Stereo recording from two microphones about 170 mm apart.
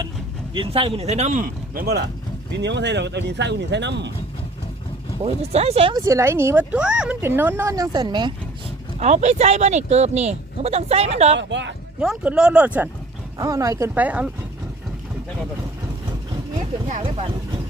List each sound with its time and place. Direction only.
0.5 s speech: 30° right (ahead or behind); by 2.0 s 65° right (ahead or behind)
2.6 s speech: 90° right
5.2 s speech: 35° right (ahead or behind)
5.9 s speech: 15° right (ahead or behind)
9.0 s speech: 40° right (ahead or behind)
11.3 s speech: 90° right
11.9 s speech: 5° right (ahead or behind)